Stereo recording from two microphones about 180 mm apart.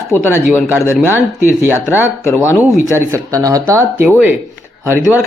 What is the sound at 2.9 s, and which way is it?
A woman's voice, 20° right (ahead or behind).